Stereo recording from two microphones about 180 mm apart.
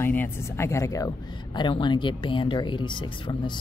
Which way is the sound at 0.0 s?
10° left (ahead or behind).